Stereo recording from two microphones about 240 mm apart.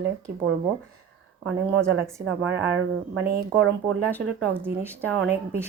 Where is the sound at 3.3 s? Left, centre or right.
Right.